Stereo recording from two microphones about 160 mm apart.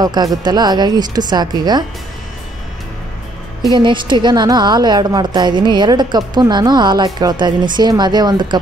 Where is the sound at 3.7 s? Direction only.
30° right (ahead or behind).